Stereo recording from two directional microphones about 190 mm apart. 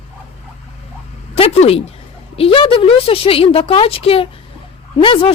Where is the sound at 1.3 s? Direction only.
30° left (ahead or behind).